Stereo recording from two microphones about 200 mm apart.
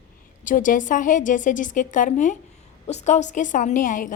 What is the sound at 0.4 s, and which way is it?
A woman's voice, 40° left (ahead or behind).